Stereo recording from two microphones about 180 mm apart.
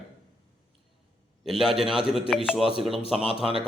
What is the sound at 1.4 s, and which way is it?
A man's voice, centre (ahead or behind).